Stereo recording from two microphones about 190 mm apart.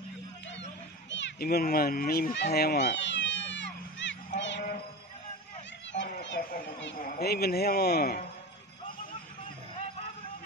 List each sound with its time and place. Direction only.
1.1 s children playing: 60° left (ahead or behind)
4.4 s sheep: 70° left (ahead or behind)
7.0 s speech: 50° left (ahead or behind)